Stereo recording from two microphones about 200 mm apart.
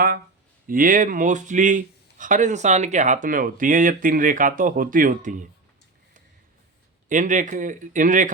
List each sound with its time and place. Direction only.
0.7 s a man's voice: 45° right (ahead or behind)
7.1 s a man's voice: 40° right (ahead or behind)